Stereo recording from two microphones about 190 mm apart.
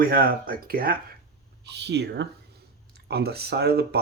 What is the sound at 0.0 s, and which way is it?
Speech, 50° right (ahead or behind).